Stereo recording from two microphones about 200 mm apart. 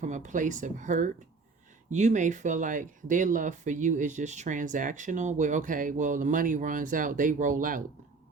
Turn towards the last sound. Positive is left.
turn(degrees=-40)  # may be behind; listen again after turning